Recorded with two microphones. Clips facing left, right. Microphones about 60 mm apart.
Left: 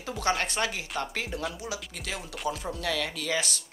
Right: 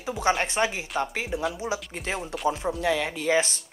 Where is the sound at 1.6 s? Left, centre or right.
Right.